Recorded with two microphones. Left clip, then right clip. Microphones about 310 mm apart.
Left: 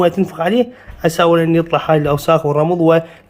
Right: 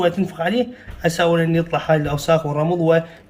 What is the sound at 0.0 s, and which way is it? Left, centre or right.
Speech, left.